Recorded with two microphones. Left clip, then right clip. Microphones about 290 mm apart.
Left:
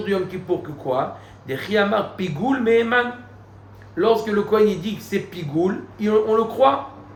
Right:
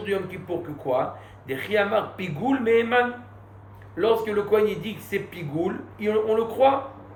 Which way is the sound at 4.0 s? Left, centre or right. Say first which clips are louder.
Left 4 dB; left.